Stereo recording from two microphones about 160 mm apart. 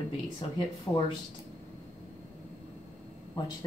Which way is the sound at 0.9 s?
15° left (ahead or behind).